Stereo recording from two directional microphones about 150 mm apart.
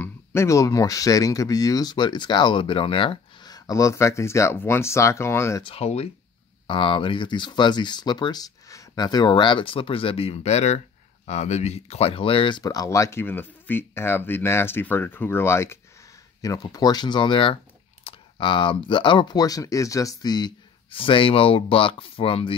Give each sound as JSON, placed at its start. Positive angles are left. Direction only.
{"t": 0.0, "sound": "speech", "side_deg": 15}
{"t": 5.6, "sound": "speech", "side_deg": 40}